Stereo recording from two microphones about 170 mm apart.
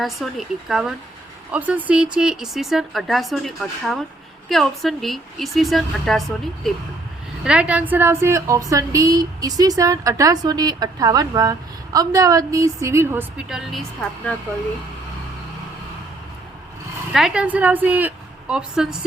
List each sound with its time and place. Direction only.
0.0 s speech: centre (ahead or behind)
7.4 s a woman's voice: 5° right (ahead or behind)
13.5 s speech: centre (ahead or behind)
17.1 s a woman's voice: 5° right (ahead or behind)